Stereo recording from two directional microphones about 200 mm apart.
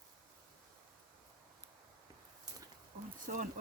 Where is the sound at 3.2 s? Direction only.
40° right (ahead or behind).